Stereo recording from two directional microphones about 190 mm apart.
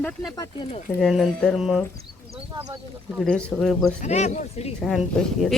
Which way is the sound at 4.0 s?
35° left (ahead or behind).